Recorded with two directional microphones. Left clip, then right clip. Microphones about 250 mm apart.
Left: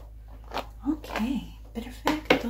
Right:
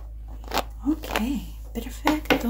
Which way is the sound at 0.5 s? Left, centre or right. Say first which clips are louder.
Right 5 dB; right.